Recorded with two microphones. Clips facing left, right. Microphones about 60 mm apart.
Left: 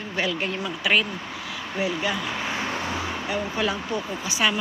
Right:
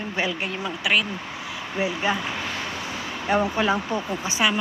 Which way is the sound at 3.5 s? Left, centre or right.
Right.